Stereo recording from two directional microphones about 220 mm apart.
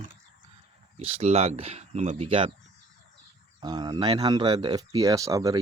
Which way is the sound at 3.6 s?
20° right (ahead or behind).